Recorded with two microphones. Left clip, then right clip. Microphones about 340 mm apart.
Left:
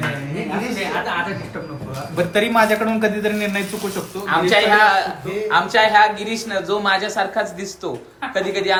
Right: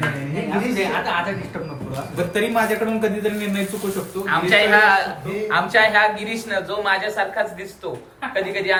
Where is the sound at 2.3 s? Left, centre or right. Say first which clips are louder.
Left 4 dB; left.